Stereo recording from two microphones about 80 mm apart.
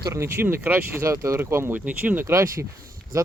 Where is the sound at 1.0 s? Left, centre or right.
Right; by 2.2 s centre.